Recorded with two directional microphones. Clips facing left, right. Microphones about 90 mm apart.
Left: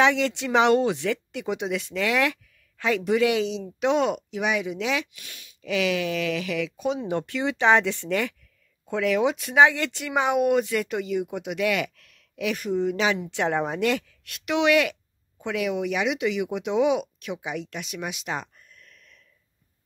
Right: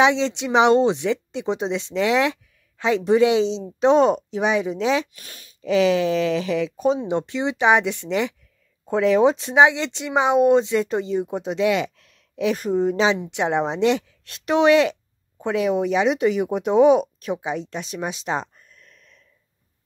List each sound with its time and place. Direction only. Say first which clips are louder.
0.0 s speech: right 3 dB; 20° right (ahead or behind)
7.0 s speech: right 3 dB; 20° right (ahead or behind)
8.8 s speech: right 6 dB; 30° right (ahead or behind)